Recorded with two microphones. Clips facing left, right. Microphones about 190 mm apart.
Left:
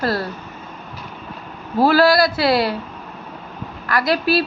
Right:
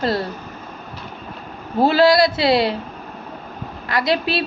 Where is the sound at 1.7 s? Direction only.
25° right (ahead or behind).